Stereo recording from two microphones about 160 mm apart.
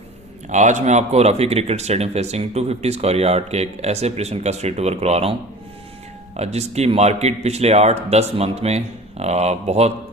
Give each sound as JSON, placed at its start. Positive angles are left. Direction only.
{"t": 0.4, "sound": "a man's voice", "side_deg": -50}